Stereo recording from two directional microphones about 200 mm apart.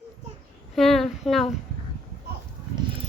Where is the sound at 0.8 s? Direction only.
Centre (ahead or behind).